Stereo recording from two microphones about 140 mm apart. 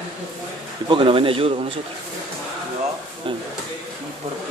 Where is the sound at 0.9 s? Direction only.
40° right (ahead or behind).